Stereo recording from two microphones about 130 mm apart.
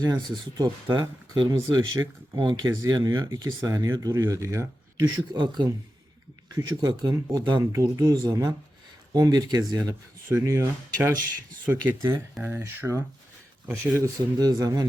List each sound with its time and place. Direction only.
0.0 s speech: 30° right (ahead or behind)